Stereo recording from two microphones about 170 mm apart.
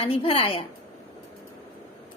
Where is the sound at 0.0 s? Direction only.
35° left (ahead or behind).